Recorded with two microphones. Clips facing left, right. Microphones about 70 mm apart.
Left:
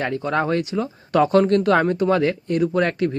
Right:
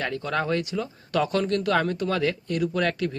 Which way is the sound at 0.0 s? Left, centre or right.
Left.